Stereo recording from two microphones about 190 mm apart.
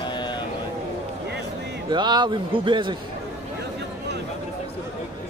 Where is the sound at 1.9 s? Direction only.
20° right (ahead or behind).